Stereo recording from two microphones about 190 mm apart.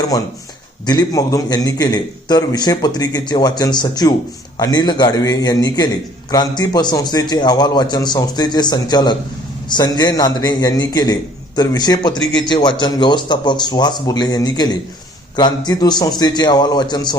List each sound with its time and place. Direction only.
0.9 s a man's voice: 20° left (ahead or behind)